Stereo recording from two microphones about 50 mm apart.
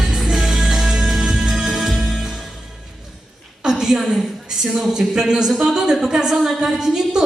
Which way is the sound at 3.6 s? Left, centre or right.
Centre.